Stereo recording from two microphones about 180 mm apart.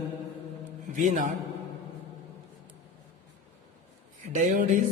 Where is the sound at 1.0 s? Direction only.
40° right (ahead or behind).